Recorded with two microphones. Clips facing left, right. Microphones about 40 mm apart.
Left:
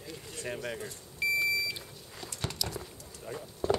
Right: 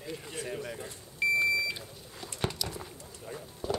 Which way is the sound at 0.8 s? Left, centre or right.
Centre.